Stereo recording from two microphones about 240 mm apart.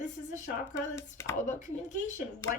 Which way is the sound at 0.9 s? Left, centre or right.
Centre.